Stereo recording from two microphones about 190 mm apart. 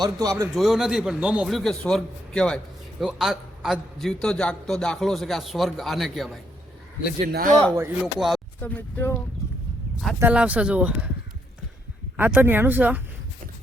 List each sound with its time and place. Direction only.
0.0 s speech: 20° right (ahead or behind)
0.5 s a man's voice: centre (ahead or behind)
7.8 s a man's voice: 5° right (ahead or behind)
8.6 s speech: 10° left (ahead or behind)
10.2 s speech: 10° right (ahead or behind)
12.1 s speech: 10° right (ahead or behind)